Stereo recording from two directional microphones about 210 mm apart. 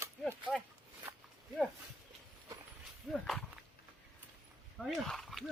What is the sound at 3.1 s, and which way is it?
Speech, centre (ahead or behind).